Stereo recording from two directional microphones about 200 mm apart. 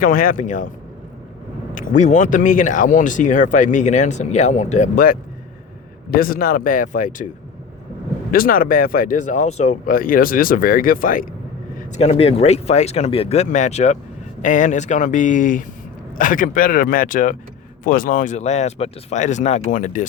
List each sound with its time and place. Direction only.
0.0 s speech: 45° left (ahead or behind)
1.7 s speech: 40° left (ahead or behind)
8.3 s speech: 45° left (ahead or behind)
11.9 s speech: 30° left (ahead or behind)